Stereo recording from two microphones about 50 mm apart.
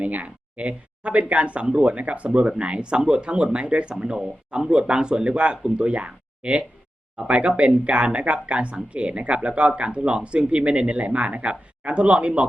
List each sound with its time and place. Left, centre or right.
0.0 s speech: right